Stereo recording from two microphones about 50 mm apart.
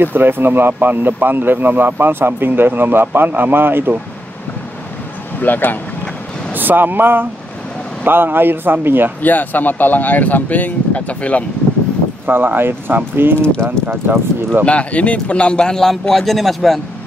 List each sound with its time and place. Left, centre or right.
0.0 s speech: right
5.4 s speech: left
6.5 s speech: right
9.2 s speech: left
12.3 s speech: right
14.6 s a man's voice: left; by 16.8 s centre